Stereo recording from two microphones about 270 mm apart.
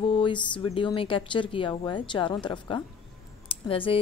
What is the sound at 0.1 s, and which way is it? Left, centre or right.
A woman's voice, centre.